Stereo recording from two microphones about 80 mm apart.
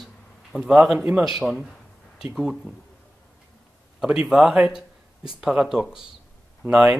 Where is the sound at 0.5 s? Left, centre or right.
Centre.